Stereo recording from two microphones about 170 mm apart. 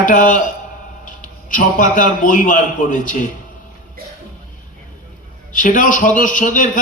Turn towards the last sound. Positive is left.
turn(degrees=50)  # may be behind; listen again after turning